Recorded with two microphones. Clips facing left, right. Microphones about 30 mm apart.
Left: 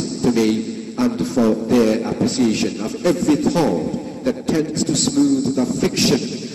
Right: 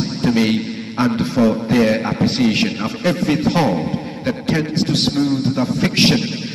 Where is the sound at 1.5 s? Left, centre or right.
Right.